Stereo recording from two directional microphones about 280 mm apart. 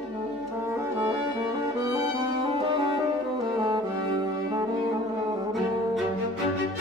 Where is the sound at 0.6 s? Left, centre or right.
Centre.